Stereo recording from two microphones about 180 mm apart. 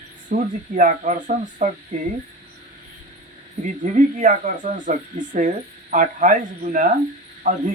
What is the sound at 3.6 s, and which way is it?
Speech, 40° right (ahead or behind).